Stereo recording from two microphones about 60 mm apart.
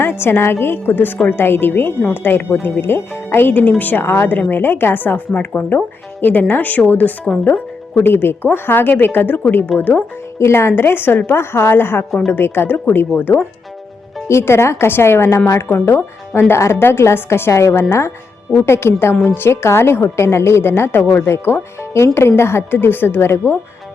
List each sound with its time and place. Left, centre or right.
0.0 s a woman's voice: left
10.3 s speech: left
14.3 s a woman's voice: left